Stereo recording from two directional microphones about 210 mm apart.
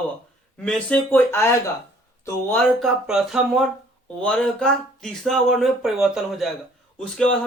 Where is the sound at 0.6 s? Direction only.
5° left (ahead or behind).